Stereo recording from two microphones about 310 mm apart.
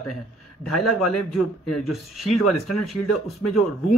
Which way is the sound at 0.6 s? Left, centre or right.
Centre.